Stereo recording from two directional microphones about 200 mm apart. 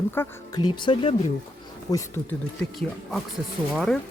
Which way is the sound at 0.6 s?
25° left (ahead or behind).